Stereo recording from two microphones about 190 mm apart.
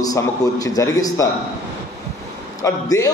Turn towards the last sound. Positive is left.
turn(degrees=20)  # may be behind; listen again after turning